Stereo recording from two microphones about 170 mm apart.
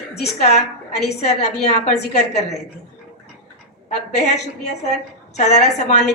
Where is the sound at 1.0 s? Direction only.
40° left (ahead or behind).